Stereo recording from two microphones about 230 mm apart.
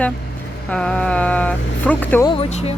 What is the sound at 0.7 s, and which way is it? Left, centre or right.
Speech, centre.